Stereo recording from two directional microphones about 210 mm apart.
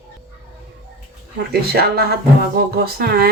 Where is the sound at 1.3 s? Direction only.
50° right (ahead or behind).